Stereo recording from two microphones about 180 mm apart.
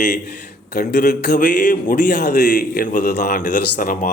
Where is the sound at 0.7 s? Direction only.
60° left (ahead or behind).